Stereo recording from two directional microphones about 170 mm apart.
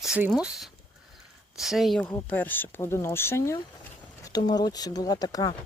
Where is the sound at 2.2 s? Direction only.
10° left (ahead or behind).